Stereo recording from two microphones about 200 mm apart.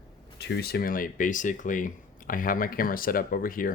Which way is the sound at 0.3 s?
55° left (ahead or behind).